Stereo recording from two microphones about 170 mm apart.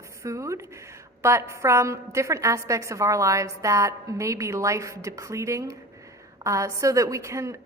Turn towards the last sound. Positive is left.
turn(degrees=-15)  # may be behind; listen again after turning